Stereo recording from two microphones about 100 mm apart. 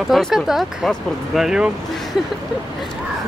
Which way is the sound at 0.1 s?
Centre (ahead or behind).